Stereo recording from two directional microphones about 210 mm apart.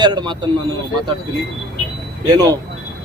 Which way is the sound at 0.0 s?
20° right (ahead or behind).